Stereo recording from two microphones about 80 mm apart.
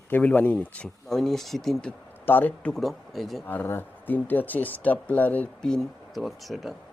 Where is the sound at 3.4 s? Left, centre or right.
Left.